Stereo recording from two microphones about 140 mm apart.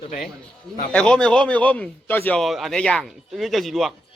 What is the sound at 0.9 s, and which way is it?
Speech, 5° left (ahead or behind).